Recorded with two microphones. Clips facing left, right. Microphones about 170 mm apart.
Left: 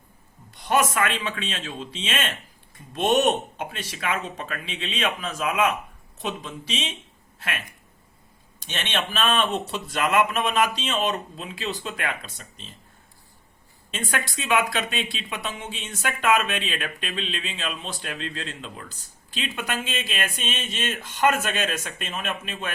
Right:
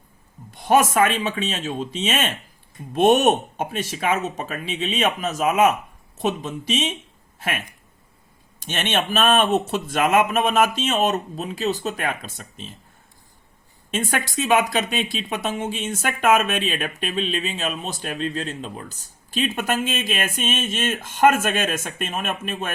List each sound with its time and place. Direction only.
0.5 s speech: 45° right (ahead or behind)
8.5 s speech: 50° right (ahead or behind)
13.9 s speech: 45° right (ahead or behind)